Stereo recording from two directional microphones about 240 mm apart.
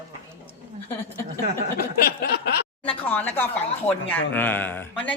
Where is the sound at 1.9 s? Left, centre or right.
Left.